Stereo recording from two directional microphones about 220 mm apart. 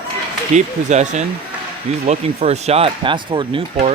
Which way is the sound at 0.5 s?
30° right (ahead or behind).